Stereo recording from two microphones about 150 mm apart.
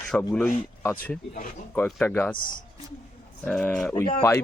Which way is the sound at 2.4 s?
65° left (ahead or behind).